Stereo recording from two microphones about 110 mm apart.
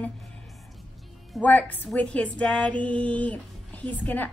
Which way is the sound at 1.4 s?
15° left (ahead or behind).